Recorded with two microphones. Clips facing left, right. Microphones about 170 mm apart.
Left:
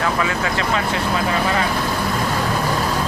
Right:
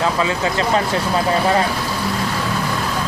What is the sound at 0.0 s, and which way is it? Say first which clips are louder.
Speech: right 2 dB; 25° right (ahead or behind).